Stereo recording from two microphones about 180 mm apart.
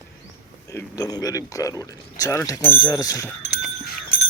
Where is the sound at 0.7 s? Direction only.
15° left (ahead or behind).